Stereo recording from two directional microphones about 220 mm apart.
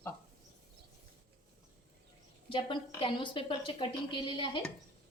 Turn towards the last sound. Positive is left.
turn(degrees=25)  # may be behind; listen again after turning